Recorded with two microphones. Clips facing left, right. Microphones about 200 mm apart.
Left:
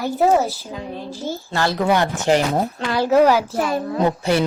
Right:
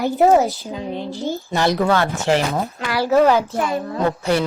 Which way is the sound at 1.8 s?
15° left (ahead or behind).